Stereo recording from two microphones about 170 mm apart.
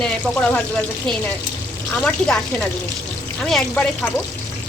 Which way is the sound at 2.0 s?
5° left (ahead or behind).